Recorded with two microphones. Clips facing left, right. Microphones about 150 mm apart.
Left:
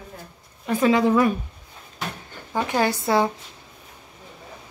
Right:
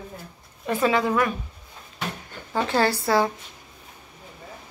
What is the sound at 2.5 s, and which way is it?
Speech, 15° left (ahead or behind).